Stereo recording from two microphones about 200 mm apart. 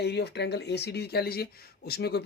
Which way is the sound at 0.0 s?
55° left (ahead or behind).